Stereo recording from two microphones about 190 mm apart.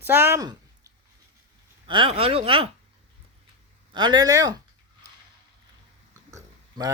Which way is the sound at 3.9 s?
20° right (ahead or behind).